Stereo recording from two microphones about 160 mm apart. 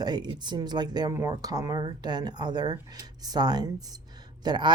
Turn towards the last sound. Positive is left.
turn(degrees=-25)  # may be behind; listen again after turning